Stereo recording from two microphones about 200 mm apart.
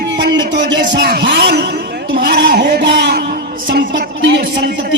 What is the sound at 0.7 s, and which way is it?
A man's voice, 60° right (ahead or behind).